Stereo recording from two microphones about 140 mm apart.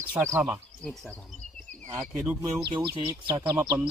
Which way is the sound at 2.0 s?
10° right (ahead or behind).